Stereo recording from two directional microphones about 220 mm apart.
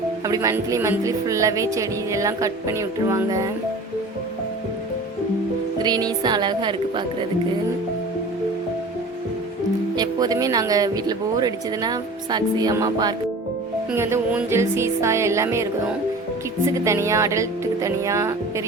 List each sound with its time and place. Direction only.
0.3 s speech: 15° right (ahead or behind)
5.8 s speech: 20° right (ahead or behind)
9.9 s speech: 15° right (ahead or behind)
16.7 s speech: 15° right (ahead or behind)